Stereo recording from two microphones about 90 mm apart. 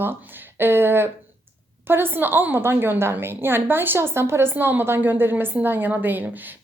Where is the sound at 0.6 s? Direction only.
25° right (ahead or behind).